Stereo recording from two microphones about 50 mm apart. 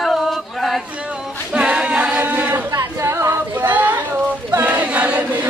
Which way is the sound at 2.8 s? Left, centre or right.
Right.